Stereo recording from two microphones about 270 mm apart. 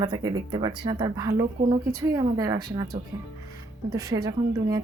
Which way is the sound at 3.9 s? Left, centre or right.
Centre.